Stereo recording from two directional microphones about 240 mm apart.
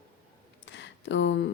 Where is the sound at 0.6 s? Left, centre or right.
Left.